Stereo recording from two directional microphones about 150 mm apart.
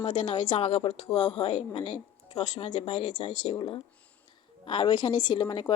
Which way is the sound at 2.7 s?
35° left (ahead or behind).